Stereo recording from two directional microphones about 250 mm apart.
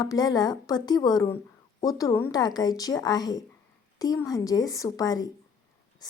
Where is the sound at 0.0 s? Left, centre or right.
Centre.